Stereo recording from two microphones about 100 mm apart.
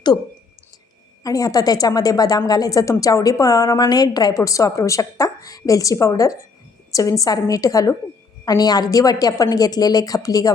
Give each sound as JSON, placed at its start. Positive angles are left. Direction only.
{"t": 1.2, "sound": "a woman's voice", "side_deg": 35}